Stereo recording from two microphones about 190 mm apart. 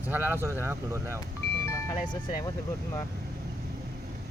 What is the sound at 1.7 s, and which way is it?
Speech, 15° left (ahead or behind).